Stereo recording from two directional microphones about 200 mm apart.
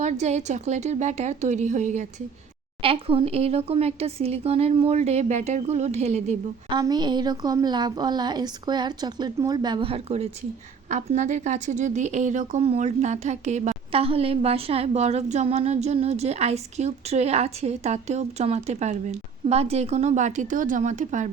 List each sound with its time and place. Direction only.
0.0 s a woman's voice: 35° right (ahead or behind)
6.7 s a woman's voice: 20° right (ahead or behind); by 21.2 s 40° right (ahead or behind)